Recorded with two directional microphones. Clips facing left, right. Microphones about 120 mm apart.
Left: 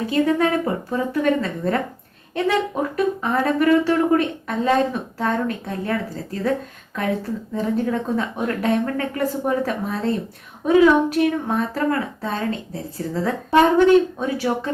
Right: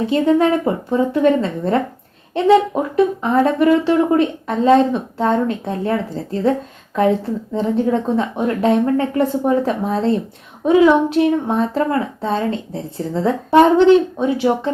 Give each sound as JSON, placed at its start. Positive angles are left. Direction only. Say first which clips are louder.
{"t": 0.0, "sound": "speech", "louder": "right 4 dB", "side_deg": -25}
{"t": 7.5, "sound": "speech", "louder": "right 5 dB", "side_deg": -25}